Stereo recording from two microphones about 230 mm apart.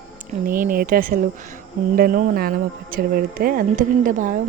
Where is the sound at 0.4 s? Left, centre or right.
Right.